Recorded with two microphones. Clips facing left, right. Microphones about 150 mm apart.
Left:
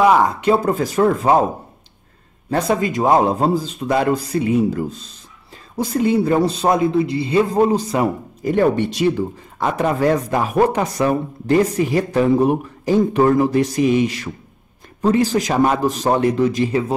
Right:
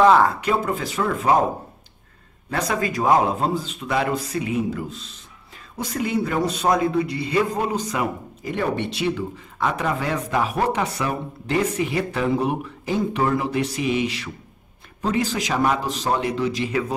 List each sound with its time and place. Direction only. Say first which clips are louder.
0.0 s speech: left 1 dB; 15° left (ahead or behind)
0.4 s speech: left 6 dB; 35° left (ahead or behind)
2.5 s speech: left 5 dB; 25° left (ahead or behind)
3.3 s a man's voice: left 5 dB; 35° left (ahead or behind)